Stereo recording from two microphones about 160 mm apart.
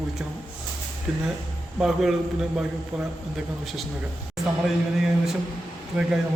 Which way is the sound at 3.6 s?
Centre (ahead or behind).